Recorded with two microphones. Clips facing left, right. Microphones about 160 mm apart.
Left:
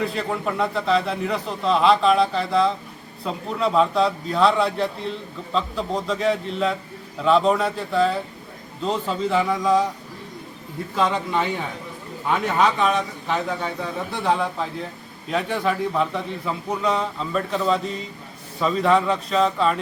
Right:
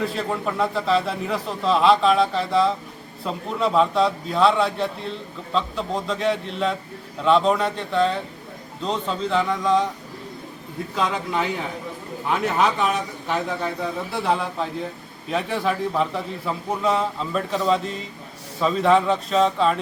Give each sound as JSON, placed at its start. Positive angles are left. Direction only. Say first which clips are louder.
{"t": 0.0, "sound": "a man's voice", "louder": "even", "side_deg": 0}
{"t": 10.9, "sound": "a man's voice", "louder": "left 2 dB", "side_deg": 0}